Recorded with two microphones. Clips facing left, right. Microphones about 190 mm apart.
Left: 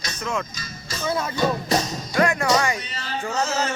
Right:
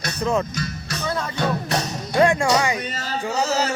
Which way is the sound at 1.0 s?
10° left (ahead or behind).